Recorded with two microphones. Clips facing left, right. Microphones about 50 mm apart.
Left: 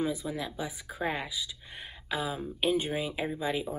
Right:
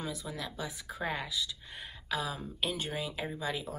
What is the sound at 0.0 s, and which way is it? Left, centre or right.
Speech, left.